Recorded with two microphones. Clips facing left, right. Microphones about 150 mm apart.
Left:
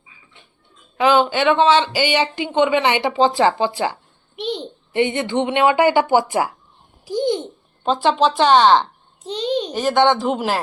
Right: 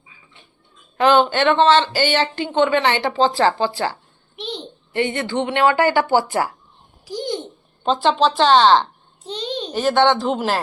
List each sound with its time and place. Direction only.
0.9 s a child's voice: 5° left (ahead or behind)
7.0 s babbling: 20° left (ahead or behind)
7.9 s a child's voice: 10° left (ahead or behind)